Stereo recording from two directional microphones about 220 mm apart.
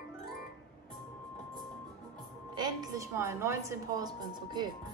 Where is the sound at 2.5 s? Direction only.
20° right (ahead or behind).